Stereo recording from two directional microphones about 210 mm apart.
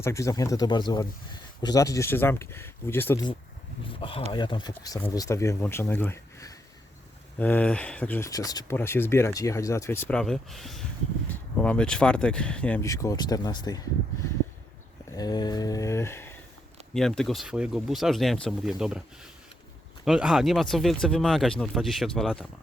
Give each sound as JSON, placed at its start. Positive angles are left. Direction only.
{"t": 0.0, "sound": "speech", "side_deg": 15}
{"t": 3.8, "sound": "speech", "side_deg": 25}
{"t": 15.1, "sound": "mantra", "side_deg": 20}
{"t": 16.9, "sound": "speech", "side_deg": 5}